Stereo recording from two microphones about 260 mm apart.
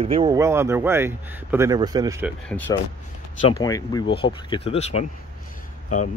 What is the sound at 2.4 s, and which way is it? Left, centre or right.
Speech, centre.